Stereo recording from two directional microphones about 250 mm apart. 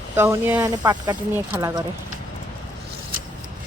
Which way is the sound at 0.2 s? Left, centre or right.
Centre.